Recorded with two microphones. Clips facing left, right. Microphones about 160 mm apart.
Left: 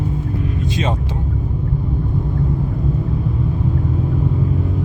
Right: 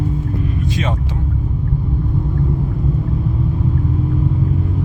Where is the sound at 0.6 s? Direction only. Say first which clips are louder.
Left 2 dB; 25° left (ahead or behind).